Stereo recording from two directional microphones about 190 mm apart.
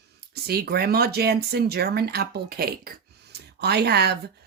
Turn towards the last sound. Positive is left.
turn(degrees=-60)  # may be behind; listen again after turning